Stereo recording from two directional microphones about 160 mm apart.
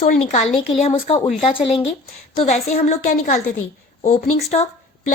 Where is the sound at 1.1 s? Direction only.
35° left (ahead or behind).